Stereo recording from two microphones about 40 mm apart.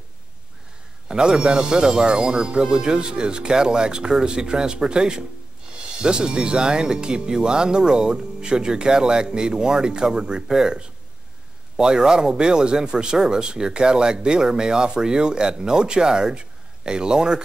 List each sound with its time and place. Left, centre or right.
1.0 s speech: centre